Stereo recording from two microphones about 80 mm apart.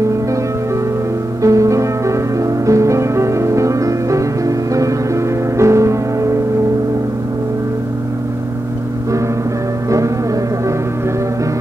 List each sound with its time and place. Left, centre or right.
1.4 s music: right
9.8 s music: right